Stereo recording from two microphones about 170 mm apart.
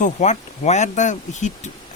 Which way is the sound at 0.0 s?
45° left (ahead or behind).